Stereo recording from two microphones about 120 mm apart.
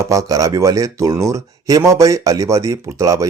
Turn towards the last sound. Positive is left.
turn(degrees=-25)  # may be behind; listen again after turning